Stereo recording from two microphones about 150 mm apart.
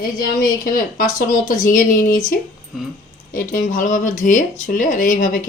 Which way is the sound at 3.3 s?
65° left (ahead or behind).